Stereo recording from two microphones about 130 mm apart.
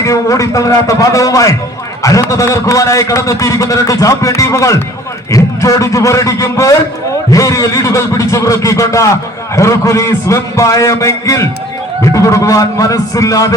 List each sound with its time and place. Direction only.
0.0 s a man's voice: 25° left (ahead or behind)